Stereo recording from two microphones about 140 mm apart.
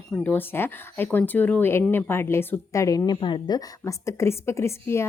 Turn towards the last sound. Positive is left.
turn(degrees=20)  # may be behind; listen again after turning